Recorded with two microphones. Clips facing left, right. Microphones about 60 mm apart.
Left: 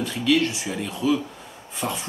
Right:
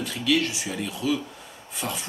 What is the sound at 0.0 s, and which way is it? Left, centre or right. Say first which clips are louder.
Speech: left 3 dB; centre.